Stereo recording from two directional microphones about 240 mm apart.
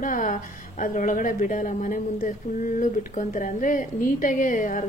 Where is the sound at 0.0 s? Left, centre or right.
Left.